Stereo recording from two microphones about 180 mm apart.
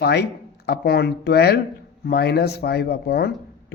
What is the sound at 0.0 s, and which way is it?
Speech, 65° left (ahead or behind).